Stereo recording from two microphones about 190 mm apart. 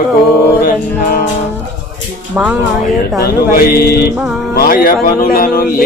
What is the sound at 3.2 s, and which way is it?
Speech, 50° left (ahead or behind).